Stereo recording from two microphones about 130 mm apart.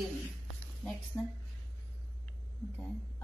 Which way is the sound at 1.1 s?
20° left (ahead or behind).